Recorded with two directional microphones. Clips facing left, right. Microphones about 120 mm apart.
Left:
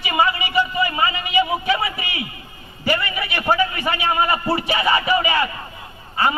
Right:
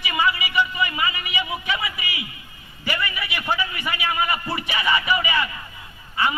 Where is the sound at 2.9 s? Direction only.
30° left (ahead or behind).